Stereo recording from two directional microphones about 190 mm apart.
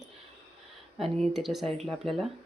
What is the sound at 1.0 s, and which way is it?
Speech, centre (ahead or behind).